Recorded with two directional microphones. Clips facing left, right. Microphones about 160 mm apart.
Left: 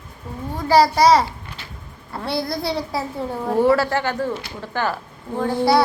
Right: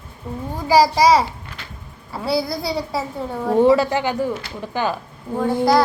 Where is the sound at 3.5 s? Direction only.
20° right (ahead or behind).